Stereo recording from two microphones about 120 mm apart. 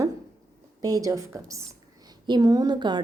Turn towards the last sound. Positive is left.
turn(degrees=-40)  # may be behind; listen again after turning